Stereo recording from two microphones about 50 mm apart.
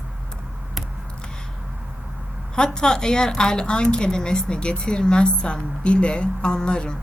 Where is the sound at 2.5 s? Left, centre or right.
Centre.